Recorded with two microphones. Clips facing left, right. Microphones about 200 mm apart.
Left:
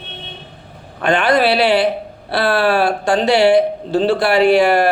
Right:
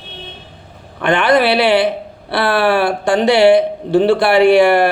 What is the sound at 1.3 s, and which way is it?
A man's voice, 55° right (ahead or behind).